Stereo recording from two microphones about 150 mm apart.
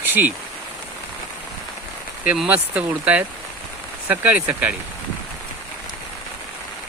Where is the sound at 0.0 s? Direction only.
10° right (ahead or behind).